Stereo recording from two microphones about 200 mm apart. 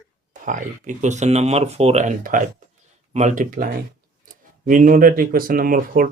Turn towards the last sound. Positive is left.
turn(degrees=-45)  # may be behind; listen again after turning